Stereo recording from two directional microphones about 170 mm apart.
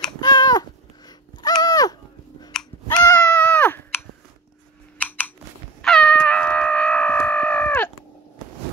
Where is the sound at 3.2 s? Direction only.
10° left (ahead or behind).